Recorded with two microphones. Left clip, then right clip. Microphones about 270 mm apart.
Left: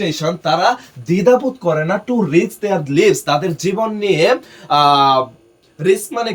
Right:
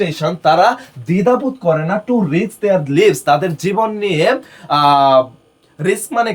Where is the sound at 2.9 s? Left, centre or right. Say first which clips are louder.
Even; centre.